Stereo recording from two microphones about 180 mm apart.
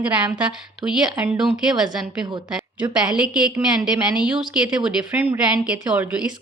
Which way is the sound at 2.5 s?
5° right (ahead or behind).